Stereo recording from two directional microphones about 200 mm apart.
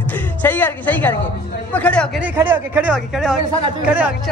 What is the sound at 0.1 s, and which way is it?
Speech, 10° left (ahead or behind).